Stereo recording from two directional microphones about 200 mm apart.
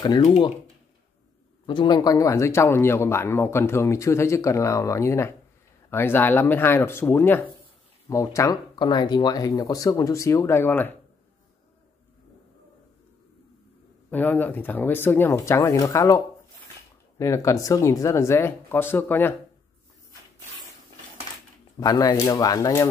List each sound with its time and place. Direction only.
0.2 s speech: 35° left (ahead or behind)
1.7 s speech: 20° left (ahead or behind)
14.1 s speech: 10° left (ahead or behind)
17.2 s speech: 15° left (ahead or behind)
21.7 s speech: 20° left (ahead or behind)